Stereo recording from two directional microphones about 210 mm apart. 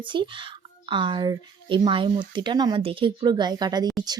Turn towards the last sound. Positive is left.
turn(degrees=-20)  # may be behind; listen again after turning